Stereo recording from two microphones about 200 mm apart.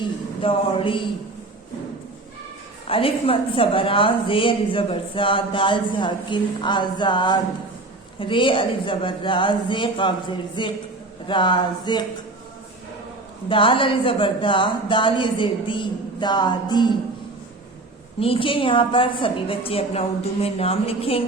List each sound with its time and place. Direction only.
0.4 s a woman's voice: 25° left (ahead or behind)
2.8 s a woman's voice: 25° left (ahead or behind)
13.5 s a woman's voice: 25° left (ahead or behind)
18.2 s a woman's voice: 25° left (ahead or behind)